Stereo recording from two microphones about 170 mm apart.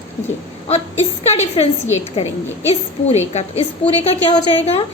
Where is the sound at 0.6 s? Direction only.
40° left (ahead or behind).